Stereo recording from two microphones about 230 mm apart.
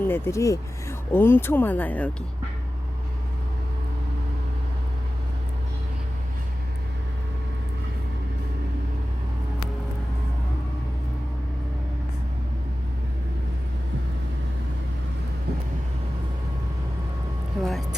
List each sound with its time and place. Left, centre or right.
0.0 s speech: centre
17.6 s vehicle: centre